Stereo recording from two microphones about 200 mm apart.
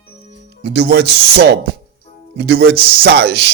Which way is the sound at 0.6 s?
60° right (ahead or behind).